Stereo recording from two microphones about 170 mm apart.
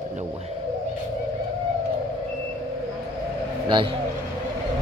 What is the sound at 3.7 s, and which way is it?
Speech, 30° right (ahead or behind).